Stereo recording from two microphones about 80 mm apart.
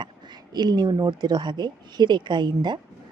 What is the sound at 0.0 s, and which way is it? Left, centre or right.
A woman's voice, right.